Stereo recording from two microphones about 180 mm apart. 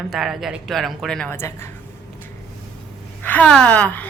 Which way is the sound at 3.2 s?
10° left (ahead or behind).